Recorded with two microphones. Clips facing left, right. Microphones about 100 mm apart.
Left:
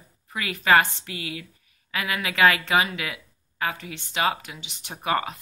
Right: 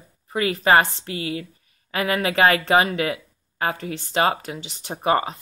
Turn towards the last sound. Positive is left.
turn(degrees=-30)  # may be behind; listen again after turning